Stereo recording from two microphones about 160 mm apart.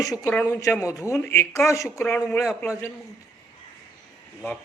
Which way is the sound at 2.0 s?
5° left (ahead or behind).